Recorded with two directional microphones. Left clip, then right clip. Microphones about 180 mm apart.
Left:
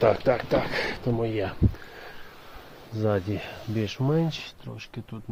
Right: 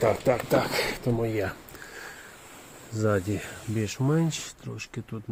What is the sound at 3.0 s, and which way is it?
Speech, 5° left (ahead or behind).